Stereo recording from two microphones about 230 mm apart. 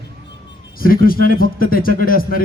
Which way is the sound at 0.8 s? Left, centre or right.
Left.